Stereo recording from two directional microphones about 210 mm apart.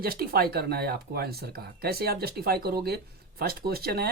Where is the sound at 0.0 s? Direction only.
45° right (ahead or behind).